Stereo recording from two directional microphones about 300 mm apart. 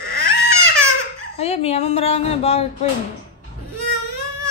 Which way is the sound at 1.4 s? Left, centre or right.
Left.